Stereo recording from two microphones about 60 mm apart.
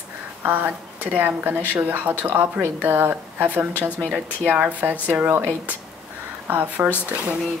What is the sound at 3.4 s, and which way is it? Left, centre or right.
A woman's voice, right.